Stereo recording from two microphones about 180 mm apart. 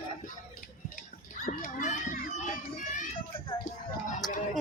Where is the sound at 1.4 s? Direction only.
45° left (ahead or behind).